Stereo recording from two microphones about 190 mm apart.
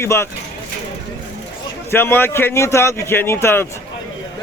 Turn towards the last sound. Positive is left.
turn(degrees=10)  # may be behind; listen again after turning